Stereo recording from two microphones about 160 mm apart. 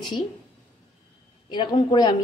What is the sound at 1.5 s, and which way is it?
Speech, 30° left (ahead or behind).